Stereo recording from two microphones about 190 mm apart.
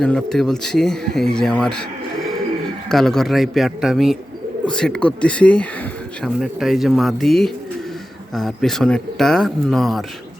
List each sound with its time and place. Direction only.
0.0 s speech: 5° left (ahead or behind)
2.9 s speech: centre (ahead or behind)